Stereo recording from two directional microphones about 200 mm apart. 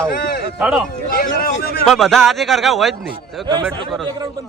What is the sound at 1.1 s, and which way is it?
Speech, 50° left (ahead or behind).